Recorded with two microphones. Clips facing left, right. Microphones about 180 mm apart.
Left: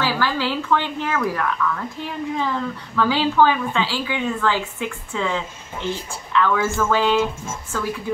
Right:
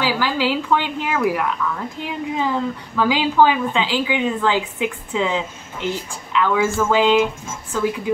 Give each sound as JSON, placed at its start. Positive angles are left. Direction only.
{"t": 0.0, "sound": "a woman's voice", "side_deg": -15}